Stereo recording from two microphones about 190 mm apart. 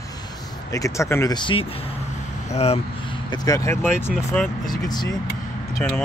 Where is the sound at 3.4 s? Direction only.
15° left (ahead or behind).